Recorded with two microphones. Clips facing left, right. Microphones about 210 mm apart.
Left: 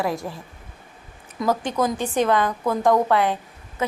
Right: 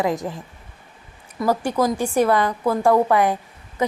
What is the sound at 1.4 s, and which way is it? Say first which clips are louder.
A woman's voice: right 2 dB; 10° right (ahead or behind).